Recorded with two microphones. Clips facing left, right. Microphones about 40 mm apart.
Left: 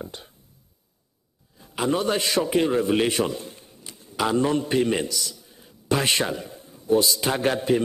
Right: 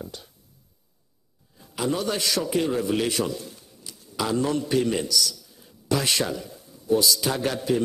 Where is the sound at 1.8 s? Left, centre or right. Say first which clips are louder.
Left 3 dB; left.